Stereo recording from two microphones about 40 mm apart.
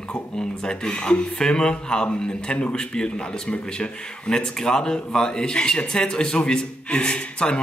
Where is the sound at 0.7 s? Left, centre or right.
Centre.